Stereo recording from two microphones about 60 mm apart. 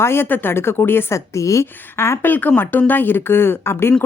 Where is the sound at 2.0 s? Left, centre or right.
Left.